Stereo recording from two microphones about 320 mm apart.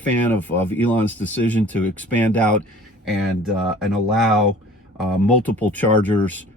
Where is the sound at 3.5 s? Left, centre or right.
Centre.